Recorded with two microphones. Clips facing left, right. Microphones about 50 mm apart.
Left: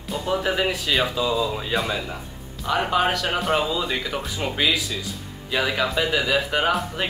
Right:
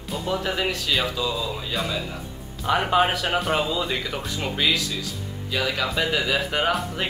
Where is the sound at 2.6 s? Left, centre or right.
Centre.